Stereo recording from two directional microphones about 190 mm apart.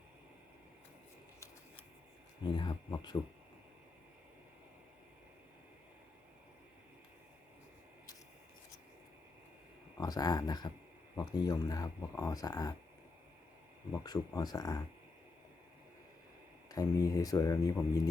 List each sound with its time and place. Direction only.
2.6 s speech: 25° left (ahead or behind)
10.0 s speech: 20° left (ahead or behind)
13.9 s speech: 20° left (ahead or behind)
16.6 s speech: 20° left (ahead or behind)